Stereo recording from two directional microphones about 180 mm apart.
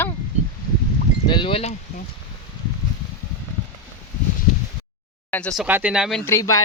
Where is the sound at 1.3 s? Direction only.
30° left (ahead or behind).